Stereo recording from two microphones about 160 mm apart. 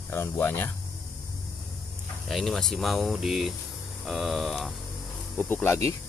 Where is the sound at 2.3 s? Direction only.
Centre (ahead or behind).